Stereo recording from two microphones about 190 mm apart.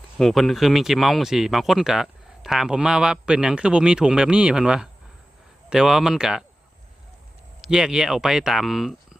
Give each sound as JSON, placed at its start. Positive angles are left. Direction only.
{"t": 0.2, "sound": "speech", "side_deg": 0}
{"t": 7.6, "sound": "speech", "side_deg": -5}